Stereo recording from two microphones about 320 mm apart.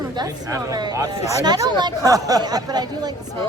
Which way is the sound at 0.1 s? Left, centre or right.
Centre.